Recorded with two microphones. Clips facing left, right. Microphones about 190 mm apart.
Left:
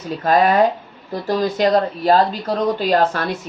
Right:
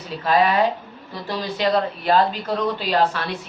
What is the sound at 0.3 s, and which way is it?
Speech, 45° left (ahead or behind).